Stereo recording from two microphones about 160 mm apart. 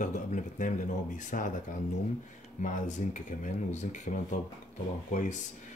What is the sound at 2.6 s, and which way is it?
Speech, 50° left (ahead or behind).